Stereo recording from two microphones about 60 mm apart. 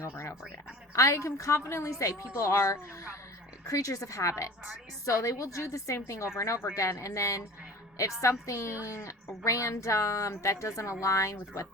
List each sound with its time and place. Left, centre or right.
0.9 s a woman's voice: left
3.7 s a woman's voice: left
7.0 s a woman's voice: left